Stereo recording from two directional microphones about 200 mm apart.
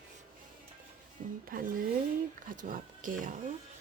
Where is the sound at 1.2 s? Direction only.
40° right (ahead or behind).